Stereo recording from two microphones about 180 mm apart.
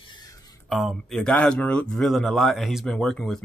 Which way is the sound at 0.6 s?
Centre (ahead or behind).